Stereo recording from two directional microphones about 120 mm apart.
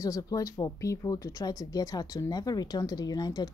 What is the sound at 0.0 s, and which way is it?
Speech, 30° left (ahead or behind).